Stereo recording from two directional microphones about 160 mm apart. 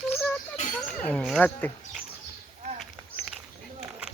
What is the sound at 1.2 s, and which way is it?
Dog, centre (ahead or behind).